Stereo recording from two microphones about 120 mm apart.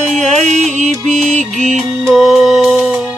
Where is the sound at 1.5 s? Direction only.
75° right (ahead or behind).